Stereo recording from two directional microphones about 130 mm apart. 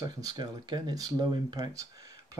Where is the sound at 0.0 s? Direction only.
30° right (ahead or behind).